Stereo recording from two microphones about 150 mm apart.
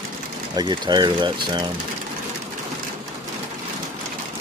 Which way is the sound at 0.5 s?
30° right (ahead or behind).